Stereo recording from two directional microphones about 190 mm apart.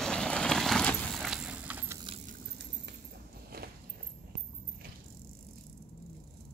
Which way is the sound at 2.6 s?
60° right (ahead or behind).